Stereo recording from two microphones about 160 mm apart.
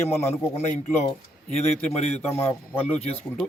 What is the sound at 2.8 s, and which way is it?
Speech, 40° left (ahead or behind).